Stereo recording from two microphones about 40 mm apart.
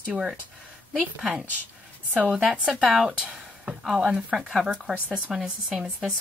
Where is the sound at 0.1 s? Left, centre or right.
Centre.